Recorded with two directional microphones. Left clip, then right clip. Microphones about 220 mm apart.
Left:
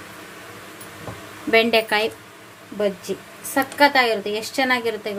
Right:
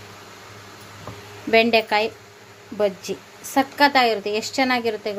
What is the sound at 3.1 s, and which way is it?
Speech, 30° right (ahead or behind).